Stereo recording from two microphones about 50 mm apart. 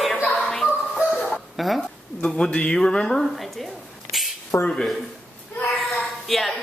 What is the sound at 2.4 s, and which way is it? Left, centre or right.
Speech, left.